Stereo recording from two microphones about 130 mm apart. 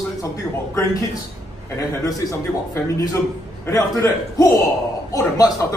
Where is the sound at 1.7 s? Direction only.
25° left (ahead or behind).